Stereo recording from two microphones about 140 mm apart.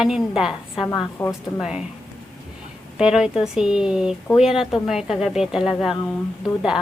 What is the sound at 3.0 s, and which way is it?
Speech, 5° right (ahead or behind).